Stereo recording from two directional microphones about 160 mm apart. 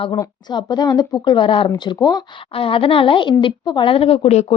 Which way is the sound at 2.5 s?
35° left (ahead or behind).